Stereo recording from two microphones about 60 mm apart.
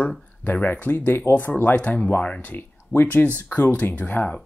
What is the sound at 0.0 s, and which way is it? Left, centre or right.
Speech, left.